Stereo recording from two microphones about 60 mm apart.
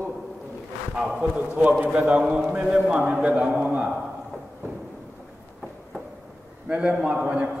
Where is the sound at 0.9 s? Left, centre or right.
Centre.